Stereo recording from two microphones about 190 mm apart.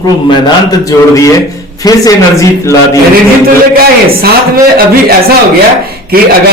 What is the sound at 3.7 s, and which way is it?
A man's voice, 50° right (ahead or behind).